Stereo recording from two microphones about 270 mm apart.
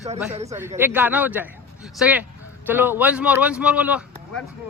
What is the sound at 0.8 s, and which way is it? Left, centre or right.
A man's voice, centre.